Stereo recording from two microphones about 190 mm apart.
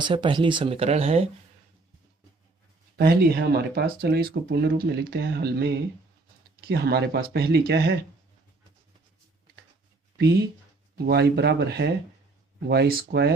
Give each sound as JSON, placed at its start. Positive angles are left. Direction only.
{"t": 0.0, "sound": "speech", "side_deg": -25}
{"t": 2.9, "sound": "speech", "side_deg": -55}
{"t": 10.9, "sound": "speech", "side_deg": -60}